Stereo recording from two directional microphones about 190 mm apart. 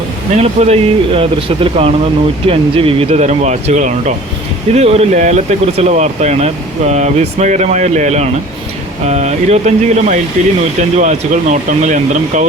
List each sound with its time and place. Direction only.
0.3 s speech: 35° right (ahead or behind)